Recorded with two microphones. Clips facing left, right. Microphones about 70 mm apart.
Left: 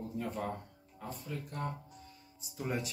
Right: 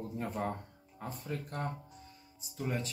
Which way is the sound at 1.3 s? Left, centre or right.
Right.